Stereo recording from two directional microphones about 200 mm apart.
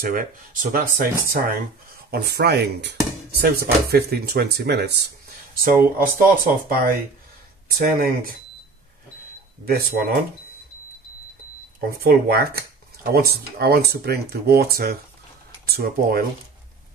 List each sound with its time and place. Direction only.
0.0 s speech: 45° right (ahead or behind)
9.7 s speech: 50° right (ahead or behind)
12.0 s speech: 50° right (ahead or behind)